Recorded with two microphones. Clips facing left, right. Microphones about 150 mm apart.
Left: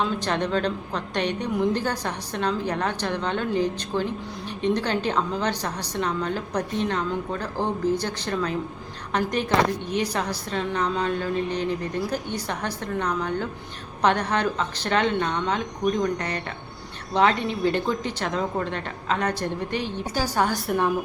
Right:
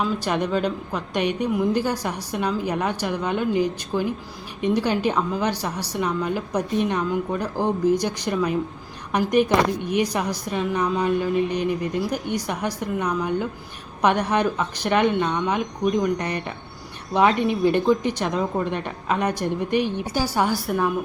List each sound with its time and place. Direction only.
0.0 s a woman's voice: 10° right (ahead or behind)